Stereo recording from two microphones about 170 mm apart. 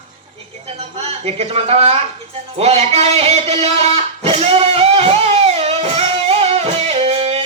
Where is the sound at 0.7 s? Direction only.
35° right (ahead or behind).